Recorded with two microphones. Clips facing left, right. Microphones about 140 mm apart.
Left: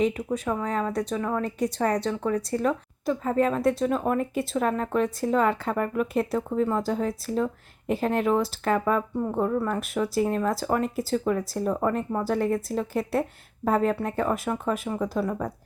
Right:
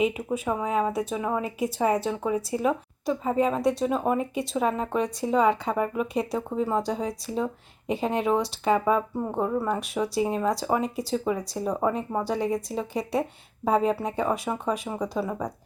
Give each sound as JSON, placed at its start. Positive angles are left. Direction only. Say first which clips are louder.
{"t": 0.0, "sound": "speech", "louder": "even", "side_deg": -5}
{"t": 14.8, "sound": "speech", "louder": "left 2 dB", "side_deg": -15}
{"t": 15.1, "sound": "speech", "louder": "left 1 dB", "side_deg": -5}